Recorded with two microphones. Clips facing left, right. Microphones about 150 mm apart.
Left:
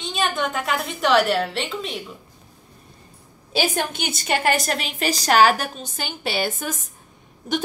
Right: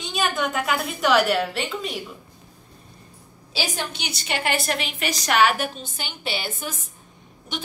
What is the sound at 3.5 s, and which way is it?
A woman's voice, 55° left (ahead or behind).